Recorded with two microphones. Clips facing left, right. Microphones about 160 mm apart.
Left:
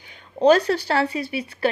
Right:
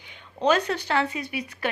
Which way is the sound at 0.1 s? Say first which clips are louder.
Left 7 dB; 35° left (ahead or behind).